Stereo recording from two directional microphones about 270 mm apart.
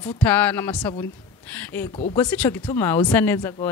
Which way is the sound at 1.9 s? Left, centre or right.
Left.